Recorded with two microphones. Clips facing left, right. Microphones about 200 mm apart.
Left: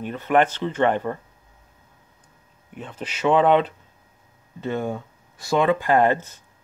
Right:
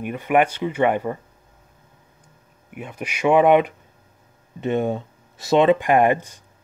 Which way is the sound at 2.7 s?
10° right (ahead or behind).